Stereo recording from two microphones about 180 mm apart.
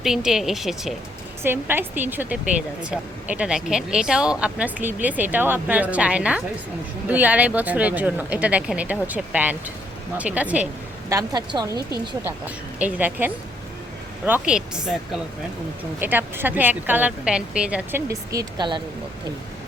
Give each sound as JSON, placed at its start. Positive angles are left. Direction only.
{"t": 0.0, "sound": "a woman's voice", "side_deg": 0}
{"t": 1.4, "sound": "speech", "side_deg": -10}
{"t": 11.1, "sound": "a woman's voice", "side_deg": -20}
{"t": 12.2, "sound": "a woman's voice", "side_deg": -10}
{"t": 16.0, "sound": "speech", "side_deg": -10}
{"t": 18.1, "sound": "a woman's voice", "side_deg": -20}